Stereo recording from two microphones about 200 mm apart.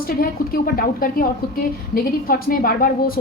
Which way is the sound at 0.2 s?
45° left (ahead or behind).